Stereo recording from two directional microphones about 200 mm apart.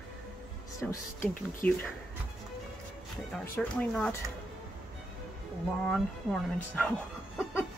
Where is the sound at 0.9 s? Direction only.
10° left (ahead or behind).